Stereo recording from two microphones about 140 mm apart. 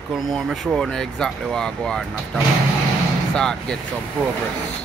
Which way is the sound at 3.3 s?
5° left (ahead or behind).